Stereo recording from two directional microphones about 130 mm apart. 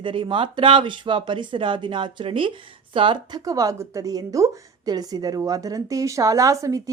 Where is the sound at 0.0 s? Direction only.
40° right (ahead or behind).